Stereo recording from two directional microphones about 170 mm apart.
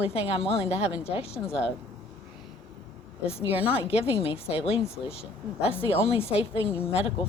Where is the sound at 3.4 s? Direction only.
35° left (ahead or behind).